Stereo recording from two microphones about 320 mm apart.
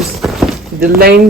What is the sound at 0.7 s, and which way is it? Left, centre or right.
Speech, right.